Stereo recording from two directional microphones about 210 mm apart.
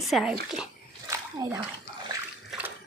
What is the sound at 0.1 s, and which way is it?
Speech, centre (ahead or behind).